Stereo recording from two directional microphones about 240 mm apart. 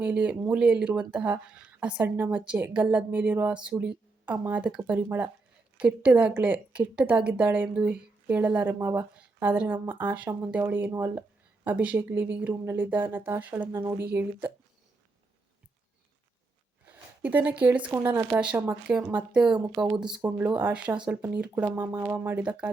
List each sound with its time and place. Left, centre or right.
0.0 s a woman's voice: centre
16.9 s a woman's voice: centre
19.5 s a woman's voice: centre
20.0 s a woman's voice: centre